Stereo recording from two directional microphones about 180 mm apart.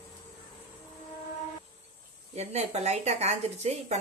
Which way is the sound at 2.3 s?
35° right (ahead or behind).